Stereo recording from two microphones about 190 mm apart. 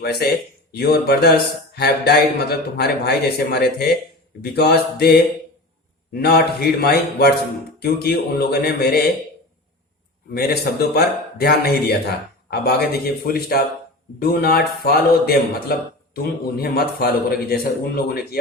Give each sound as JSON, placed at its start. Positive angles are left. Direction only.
{"t": 0.0, "sound": "a man's voice", "side_deg": 55}
{"t": 10.3, "sound": "a man's voice", "side_deg": 55}